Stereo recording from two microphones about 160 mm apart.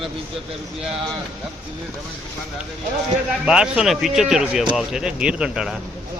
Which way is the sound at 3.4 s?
5° right (ahead or behind).